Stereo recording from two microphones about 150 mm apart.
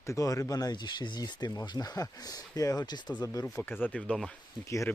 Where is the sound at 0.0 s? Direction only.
20° left (ahead or behind).